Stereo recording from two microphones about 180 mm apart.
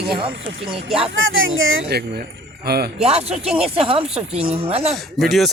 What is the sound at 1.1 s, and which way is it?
Speech, 90° right.